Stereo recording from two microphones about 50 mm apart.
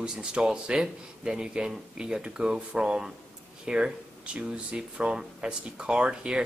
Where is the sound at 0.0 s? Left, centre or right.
Centre.